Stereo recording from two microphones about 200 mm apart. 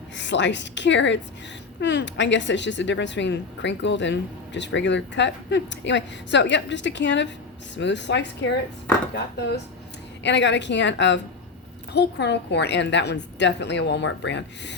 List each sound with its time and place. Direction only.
0.2 s speech: 60° left (ahead or behind)
10.2 s speech: 60° left (ahead or behind)